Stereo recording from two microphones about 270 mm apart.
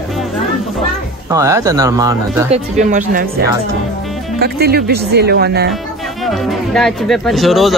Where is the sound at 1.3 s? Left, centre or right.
Centre.